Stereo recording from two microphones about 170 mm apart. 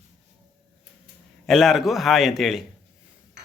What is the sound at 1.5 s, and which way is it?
Speech, centre (ahead or behind).